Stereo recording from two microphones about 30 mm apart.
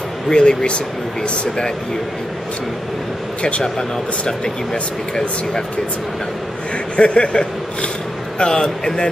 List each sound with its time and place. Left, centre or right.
0.3 s speech: left
1.2 s speech: left
7.0 s speech: left